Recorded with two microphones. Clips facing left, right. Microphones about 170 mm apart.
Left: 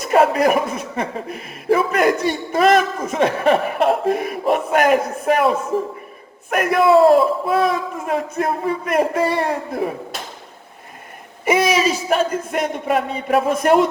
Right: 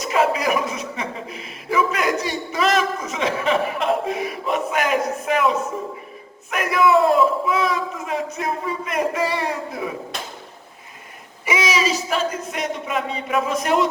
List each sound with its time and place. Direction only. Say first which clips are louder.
0.0 s a man's voice: left 5 dB; 55° left (ahead or behind)
6.5 s a man's voice: left 4 dB; 50° left (ahead or behind)
11.4 s a man's voice: left 5 dB; 55° left (ahead or behind)